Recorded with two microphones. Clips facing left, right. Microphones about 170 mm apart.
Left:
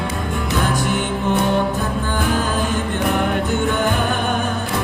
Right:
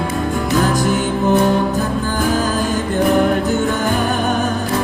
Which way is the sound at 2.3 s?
40° right (ahead or behind).